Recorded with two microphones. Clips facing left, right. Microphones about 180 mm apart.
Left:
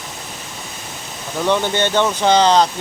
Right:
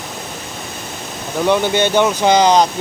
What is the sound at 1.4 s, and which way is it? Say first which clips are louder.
Speech: right 3 dB; 10° right (ahead or behind).